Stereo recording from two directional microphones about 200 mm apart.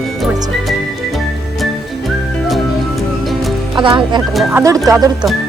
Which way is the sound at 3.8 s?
25° right (ahead or behind).